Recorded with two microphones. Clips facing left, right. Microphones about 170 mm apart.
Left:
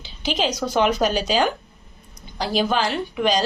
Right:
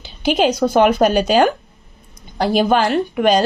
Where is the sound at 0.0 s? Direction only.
55° right (ahead or behind).